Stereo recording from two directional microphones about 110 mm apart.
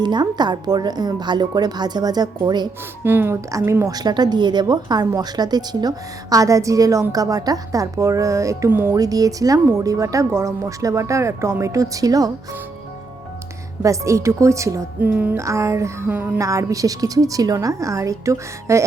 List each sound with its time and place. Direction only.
0.0 s a woman's voice: 40° right (ahead or behind)
3.0 s a woman's voice: 20° right (ahead or behind)
9.0 s a woman's voice: 35° right (ahead or behind)
13.8 s speech: 30° right (ahead or behind)
15.0 s music: 15° right (ahead or behind)
15.4 s speech: 30° right (ahead or behind)
16.4 s speech: 30° right (ahead or behind)